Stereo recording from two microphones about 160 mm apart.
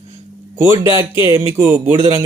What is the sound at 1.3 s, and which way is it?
Speech, 15° right (ahead or behind).